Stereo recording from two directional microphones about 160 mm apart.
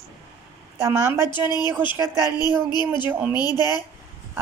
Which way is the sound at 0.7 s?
15° right (ahead or behind).